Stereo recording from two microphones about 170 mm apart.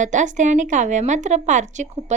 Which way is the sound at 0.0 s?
45° right (ahead or behind).